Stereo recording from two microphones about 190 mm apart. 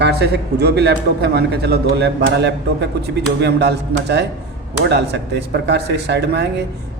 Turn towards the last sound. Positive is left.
turn(degrees=-60)  # may be behind; listen again after turning